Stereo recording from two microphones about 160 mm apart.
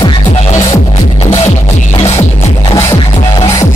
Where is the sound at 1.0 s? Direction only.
45° left (ahead or behind).